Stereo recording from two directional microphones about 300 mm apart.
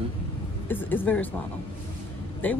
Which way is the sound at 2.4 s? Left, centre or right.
Centre.